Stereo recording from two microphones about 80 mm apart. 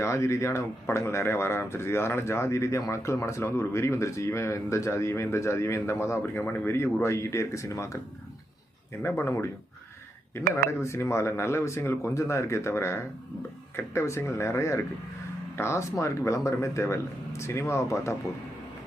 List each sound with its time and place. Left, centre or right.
0.0 s speech: left
9.0 s speech: left